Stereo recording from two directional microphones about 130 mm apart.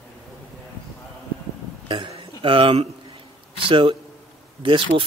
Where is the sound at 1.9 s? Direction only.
40° right (ahead or behind).